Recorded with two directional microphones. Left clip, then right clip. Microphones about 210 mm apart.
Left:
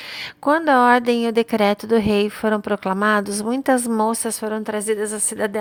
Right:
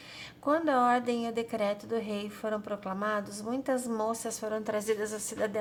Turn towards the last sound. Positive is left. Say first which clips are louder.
# left 9 dB
turn(degrees=35)  # may be behind; listen again after turning